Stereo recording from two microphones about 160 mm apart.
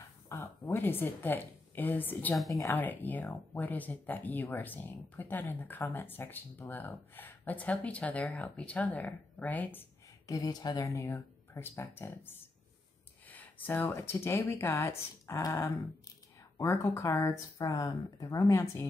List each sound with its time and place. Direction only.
0.3 s a woman's voice: 15° left (ahead or behind)
2.3 s a woman's voice: centre (ahead or behind)
2.6 s speech: 10° left (ahead or behind)